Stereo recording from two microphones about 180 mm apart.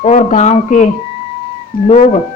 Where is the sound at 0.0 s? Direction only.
40° left (ahead or behind).